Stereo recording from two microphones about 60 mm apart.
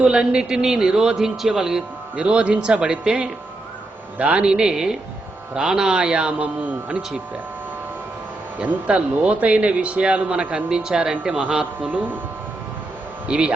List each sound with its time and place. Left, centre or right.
0.0 s a man's voice: centre
2.2 s a man's voice: centre
6.7 s speech: right
8.5 s speech: right
11.9 s speech: right
13.2 s speech: centre